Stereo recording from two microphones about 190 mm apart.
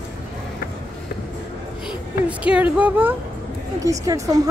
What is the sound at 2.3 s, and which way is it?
A woman's voice, 5° right (ahead or behind).